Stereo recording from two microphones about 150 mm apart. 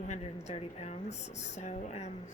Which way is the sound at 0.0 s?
50° left (ahead or behind).